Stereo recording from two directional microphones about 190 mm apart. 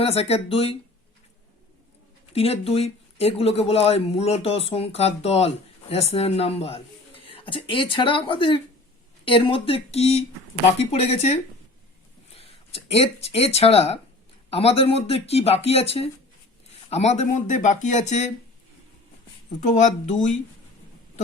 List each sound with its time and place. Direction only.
0.0 s speech: 30° left (ahead or behind)
2.3 s speech: 30° left (ahead or behind)
19.5 s speech: 40° left (ahead or behind)